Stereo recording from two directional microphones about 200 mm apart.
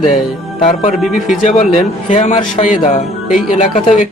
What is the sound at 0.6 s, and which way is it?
Speech, 35° left (ahead or behind).